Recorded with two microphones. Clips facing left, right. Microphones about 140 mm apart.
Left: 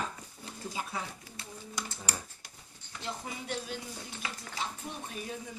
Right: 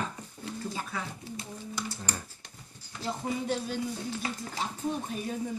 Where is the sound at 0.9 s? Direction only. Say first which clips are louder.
Even; 30° left (ahead or behind).